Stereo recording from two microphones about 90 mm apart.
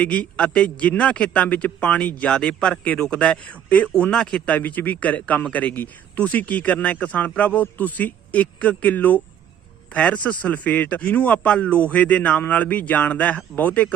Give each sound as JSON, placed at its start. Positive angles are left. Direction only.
{"t": 0.0, "sound": "a man's voice", "side_deg": 15}